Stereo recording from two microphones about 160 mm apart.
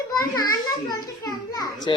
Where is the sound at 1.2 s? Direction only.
25° left (ahead or behind).